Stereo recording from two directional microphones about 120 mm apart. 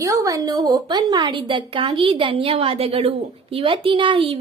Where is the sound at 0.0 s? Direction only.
25° right (ahead or behind).